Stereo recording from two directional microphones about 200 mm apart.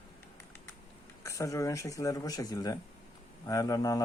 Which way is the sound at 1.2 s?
15° left (ahead or behind).